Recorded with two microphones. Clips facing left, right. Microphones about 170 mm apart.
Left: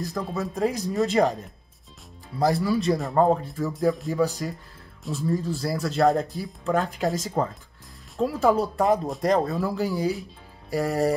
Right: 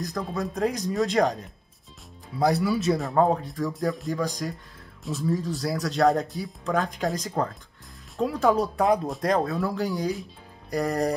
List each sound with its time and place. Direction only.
0.0 s speech: centre (ahead or behind)